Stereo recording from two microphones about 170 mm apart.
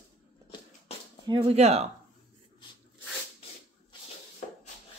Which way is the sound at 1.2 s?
30° right (ahead or behind).